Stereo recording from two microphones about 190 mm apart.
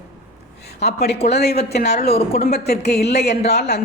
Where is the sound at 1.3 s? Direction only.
60° left (ahead or behind).